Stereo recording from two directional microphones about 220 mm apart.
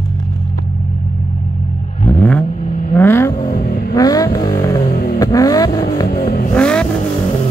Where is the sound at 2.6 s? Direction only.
30° left (ahead or behind).